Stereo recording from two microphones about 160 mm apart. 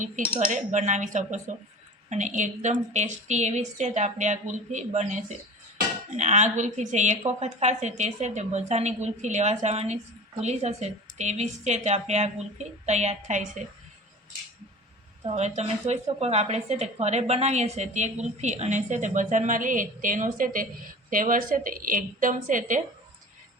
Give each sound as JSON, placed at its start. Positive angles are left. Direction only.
{"t": 0.3, "sound": "a woman's voice", "side_deg": -50}
{"t": 15.2, "sound": "a woman's voice", "side_deg": -40}